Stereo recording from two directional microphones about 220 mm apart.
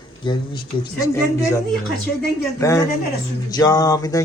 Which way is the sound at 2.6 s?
15° left (ahead or behind).